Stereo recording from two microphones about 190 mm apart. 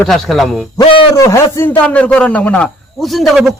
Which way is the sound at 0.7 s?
20° left (ahead or behind).